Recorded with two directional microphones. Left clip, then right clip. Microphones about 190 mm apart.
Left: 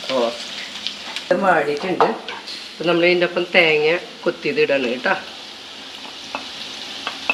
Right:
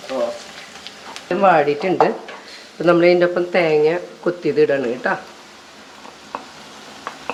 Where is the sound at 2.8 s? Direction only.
60° right (ahead or behind).